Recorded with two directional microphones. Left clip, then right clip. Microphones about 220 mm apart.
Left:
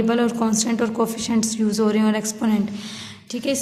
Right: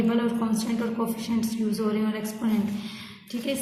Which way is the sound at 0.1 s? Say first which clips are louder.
Left 6 dB; 50° left (ahead or behind).